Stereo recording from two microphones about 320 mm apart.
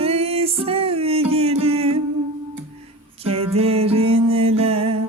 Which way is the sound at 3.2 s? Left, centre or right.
Centre.